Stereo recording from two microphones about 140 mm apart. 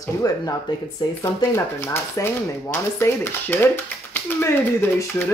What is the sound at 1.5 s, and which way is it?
Speech, 20° left (ahead or behind).